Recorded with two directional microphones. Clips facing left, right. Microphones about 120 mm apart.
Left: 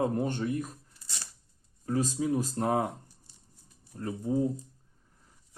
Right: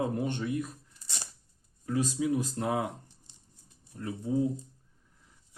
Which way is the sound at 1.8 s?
40° left (ahead or behind).